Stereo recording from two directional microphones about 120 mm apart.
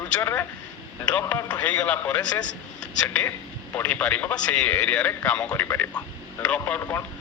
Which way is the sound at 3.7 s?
10° left (ahead or behind).